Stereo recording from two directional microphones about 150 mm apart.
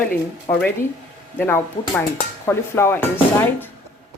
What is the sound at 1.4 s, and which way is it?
Speech, 15° left (ahead or behind).